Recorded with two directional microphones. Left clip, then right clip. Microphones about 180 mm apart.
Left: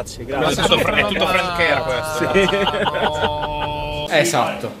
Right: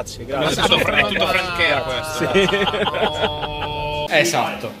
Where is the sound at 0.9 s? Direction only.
50° left (ahead or behind).